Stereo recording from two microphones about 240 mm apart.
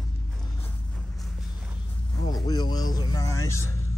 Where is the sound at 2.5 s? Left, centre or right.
Centre.